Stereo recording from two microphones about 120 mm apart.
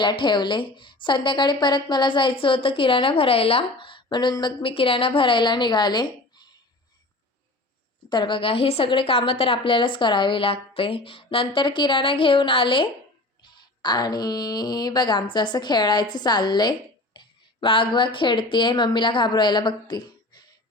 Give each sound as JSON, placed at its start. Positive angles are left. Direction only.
{"t": 0.0, "sound": "a woman's voice", "side_deg": 40}
{"t": 8.1, "sound": "a woman's voice", "side_deg": 40}
{"t": 13.4, "sound": "a sound", "side_deg": 35}
{"t": 17.2, "sound": "speech", "side_deg": 45}